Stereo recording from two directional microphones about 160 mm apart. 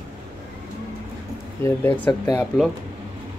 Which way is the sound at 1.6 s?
10° left (ahead or behind).